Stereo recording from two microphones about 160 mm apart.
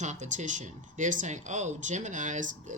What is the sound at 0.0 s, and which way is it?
Speech, 50° right (ahead or behind).